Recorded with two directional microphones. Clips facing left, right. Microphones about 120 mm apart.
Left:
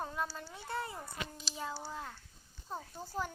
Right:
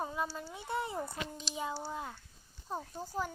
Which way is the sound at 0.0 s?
10° right (ahead or behind).